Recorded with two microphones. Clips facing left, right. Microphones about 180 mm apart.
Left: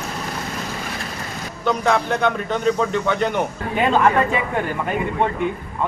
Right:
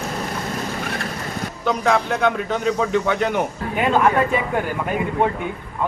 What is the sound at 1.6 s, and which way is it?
A man's voice, 5° right (ahead or behind).